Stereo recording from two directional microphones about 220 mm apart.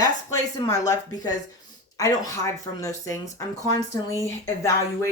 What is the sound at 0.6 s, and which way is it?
Speech, 15° left (ahead or behind).